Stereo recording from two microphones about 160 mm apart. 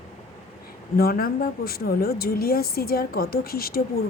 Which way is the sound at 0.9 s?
70° left (ahead or behind).